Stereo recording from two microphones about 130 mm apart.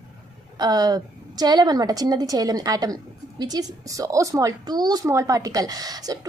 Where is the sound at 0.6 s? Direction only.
30° right (ahead or behind).